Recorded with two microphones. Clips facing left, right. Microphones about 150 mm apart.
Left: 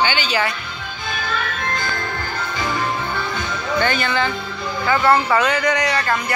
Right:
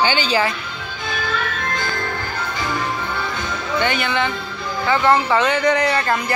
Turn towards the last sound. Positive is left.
turn(degrees=-30)  # may be behind; listen again after turning